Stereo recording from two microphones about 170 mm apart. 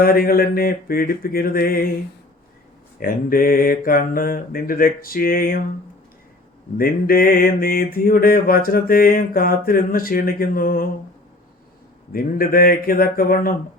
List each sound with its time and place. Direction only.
0.0 s mantra: 60° left (ahead or behind)
3.0 s mantra: 55° left (ahead or behind)
6.7 s mantra: 60° left (ahead or behind)
12.1 s mantra: 60° left (ahead or behind)